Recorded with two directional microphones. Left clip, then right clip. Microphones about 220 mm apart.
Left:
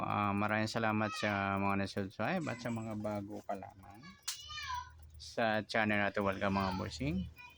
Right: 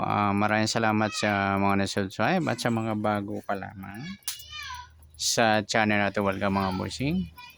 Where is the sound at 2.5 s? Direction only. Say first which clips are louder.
Right 13 dB; 40° right (ahead or behind).